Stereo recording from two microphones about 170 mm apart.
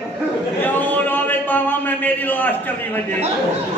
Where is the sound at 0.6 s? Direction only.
10° left (ahead or behind).